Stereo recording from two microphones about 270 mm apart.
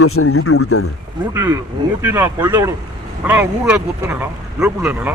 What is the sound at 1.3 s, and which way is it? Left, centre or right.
Speech, centre.